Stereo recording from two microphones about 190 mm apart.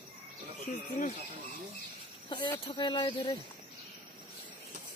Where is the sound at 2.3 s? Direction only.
25° left (ahead or behind).